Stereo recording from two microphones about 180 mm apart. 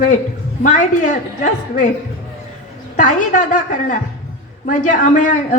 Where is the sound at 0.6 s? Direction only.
45° left (ahead or behind).